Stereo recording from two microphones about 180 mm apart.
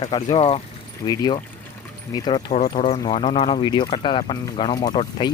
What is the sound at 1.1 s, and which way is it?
Speech, 25° left (ahead or behind).